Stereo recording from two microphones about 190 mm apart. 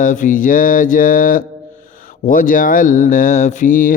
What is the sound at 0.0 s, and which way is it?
Speech, 40° left (ahead or behind).